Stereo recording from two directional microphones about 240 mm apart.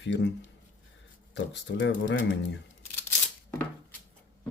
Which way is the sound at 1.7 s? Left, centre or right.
Left.